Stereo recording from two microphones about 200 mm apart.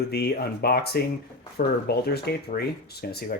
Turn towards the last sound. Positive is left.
turn(degrees=50)  # may be behind; listen again after turning